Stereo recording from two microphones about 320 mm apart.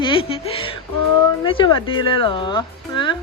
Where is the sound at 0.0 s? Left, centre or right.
Centre.